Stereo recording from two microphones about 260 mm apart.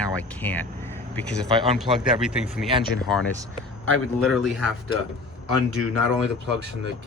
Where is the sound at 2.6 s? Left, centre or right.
Centre.